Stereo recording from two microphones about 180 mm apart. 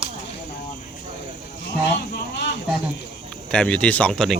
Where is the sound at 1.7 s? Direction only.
70° left (ahead or behind).